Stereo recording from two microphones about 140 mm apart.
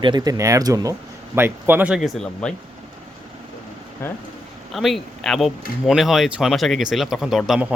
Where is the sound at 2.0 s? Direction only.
5° left (ahead or behind).